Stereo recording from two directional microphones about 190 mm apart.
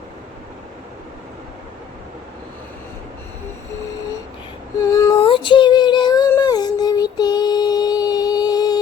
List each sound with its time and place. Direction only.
4.8 s female singing: 15° left (ahead or behind)